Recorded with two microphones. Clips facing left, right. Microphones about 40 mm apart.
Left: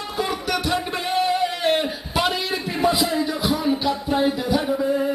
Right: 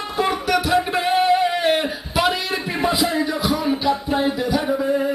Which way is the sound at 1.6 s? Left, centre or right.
Centre.